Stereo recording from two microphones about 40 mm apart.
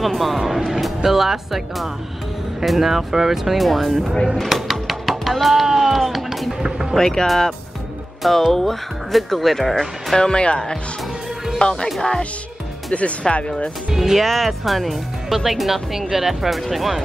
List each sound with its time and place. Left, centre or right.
0.0 s speech: centre
4.5 s music: centre
6.6 s music: centre
7.0 s speech: centre
10.1 s speech: left
12.9 s speech: left
13.9 s speech: centre
14.2 s speech: centre